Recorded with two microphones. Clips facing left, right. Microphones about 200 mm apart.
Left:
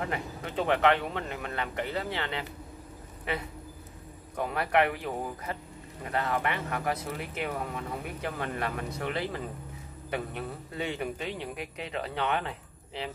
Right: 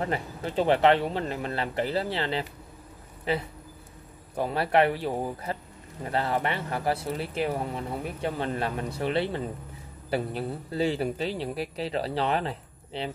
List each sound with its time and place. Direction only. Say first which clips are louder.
0.0 s a man's voice: right 4 dB; 30° right (ahead or behind)